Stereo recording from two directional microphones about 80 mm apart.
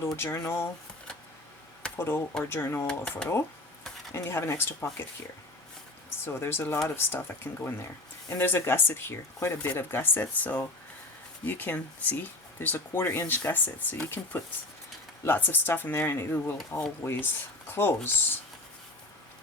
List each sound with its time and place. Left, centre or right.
0.0 s speech: left
2.0 s speech: left
2.8 s speech: centre
4.1 s speech: left
6.2 s speech: left